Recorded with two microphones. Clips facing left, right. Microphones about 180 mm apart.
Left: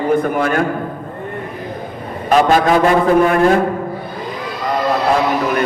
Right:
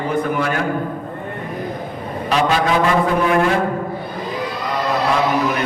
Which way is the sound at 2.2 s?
50° left (ahead or behind).